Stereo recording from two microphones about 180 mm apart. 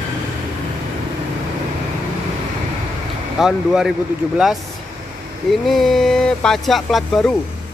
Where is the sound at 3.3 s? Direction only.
5° right (ahead or behind).